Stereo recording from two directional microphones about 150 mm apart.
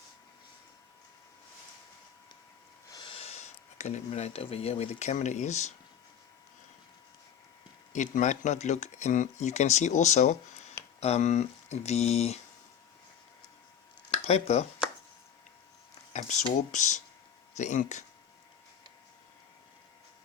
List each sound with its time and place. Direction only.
2.9 s speech: 35° left (ahead or behind); by 5.7 s 50° left (ahead or behind)
7.9 s speech: 55° left (ahead or behind)
14.3 s speech: 45° left (ahead or behind)
16.1 s speech: 55° left (ahead or behind)